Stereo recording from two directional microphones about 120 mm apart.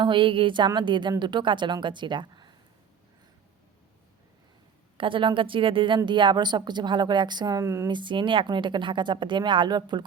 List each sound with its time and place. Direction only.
0.0 s speech: 45° right (ahead or behind)
4.9 s speech: 45° right (ahead or behind); by 7.9 s 25° right (ahead or behind)
7.9 s speech: 40° right (ahead or behind)